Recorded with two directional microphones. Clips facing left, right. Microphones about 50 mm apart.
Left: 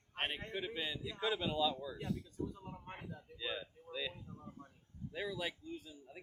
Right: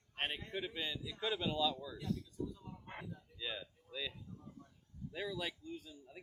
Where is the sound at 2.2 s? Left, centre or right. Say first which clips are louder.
Left 1 dB; left.